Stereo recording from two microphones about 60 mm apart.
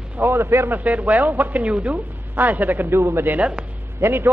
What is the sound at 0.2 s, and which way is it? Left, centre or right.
Speech, right.